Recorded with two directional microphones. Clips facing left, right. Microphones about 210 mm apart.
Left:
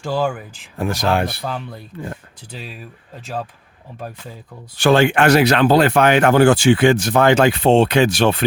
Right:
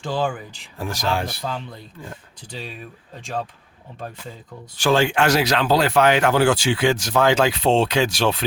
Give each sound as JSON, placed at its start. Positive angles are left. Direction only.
{"t": 0.0, "sound": "speech", "side_deg": 10}
{"t": 0.8, "sound": "speech", "side_deg": 60}
{"t": 2.5, "sound": "speech", "side_deg": 5}
{"t": 4.8, "sound": "speech", "side_deg": 60}